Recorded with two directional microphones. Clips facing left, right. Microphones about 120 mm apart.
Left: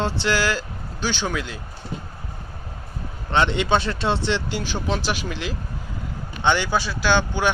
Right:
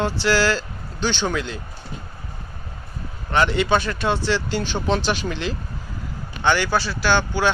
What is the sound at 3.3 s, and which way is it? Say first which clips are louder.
Speech: right 1 dB; 25° left (ahead or behind).